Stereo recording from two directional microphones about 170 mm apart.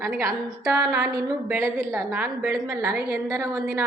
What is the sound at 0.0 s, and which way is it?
A woman's voice, 15° right (ahead or behind).